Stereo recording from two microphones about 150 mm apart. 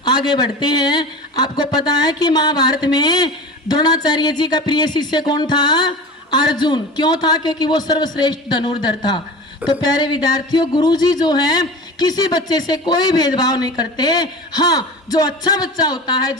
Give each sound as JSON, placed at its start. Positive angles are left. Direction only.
{"t": 0.0, "sound": "speech", "side_deg": 25}